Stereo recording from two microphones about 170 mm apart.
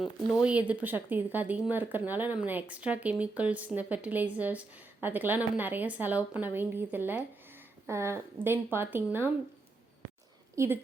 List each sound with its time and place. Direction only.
0.4 s speech: 10° right (ahead or behind)
10.5 s speech: 15° right (ahead or behind)